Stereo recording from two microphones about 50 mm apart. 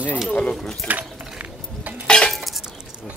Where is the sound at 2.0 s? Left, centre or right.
Centre.